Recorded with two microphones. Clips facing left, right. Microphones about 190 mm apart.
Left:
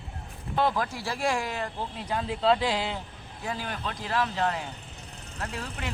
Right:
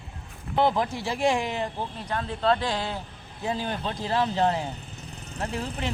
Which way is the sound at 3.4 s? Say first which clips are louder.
Right 5 dB; 25° right (ahead or behind).